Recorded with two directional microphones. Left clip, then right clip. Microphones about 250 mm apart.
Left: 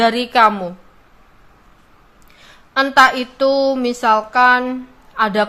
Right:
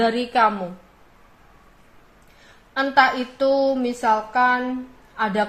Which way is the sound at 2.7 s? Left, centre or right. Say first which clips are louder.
Left 6 dB; centre.